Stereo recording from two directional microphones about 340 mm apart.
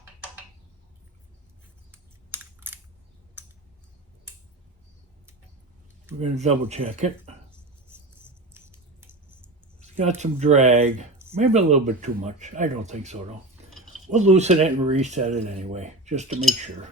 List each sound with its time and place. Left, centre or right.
1.9 s typing: centre
6.1 s speech: centre
8.5 s squawk: centre
9.8 s speech: centre